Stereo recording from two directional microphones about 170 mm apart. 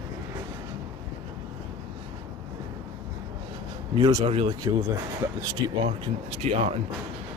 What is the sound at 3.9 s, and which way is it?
Speech, 25° right (ahead or behind).